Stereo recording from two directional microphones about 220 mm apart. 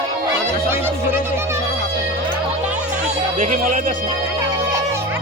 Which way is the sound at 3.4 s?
40° right (ahead or behind).